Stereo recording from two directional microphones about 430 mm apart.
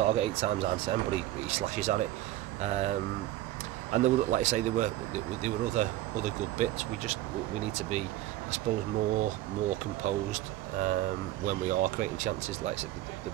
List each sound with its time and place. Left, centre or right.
0.0 s speech: centre
9.1 s speech: centre